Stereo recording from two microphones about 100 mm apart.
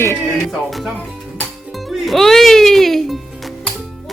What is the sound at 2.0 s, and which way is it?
Speech, 5° left (ahead or behind).